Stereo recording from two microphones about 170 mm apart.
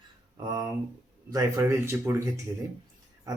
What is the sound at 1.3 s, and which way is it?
Speech, 15° right (ahead or behind).